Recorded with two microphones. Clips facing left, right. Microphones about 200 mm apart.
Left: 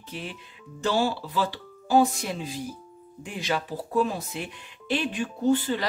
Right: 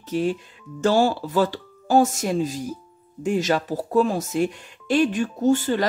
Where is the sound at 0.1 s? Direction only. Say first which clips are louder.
Right 14 dB; 45° right (ahead or behind).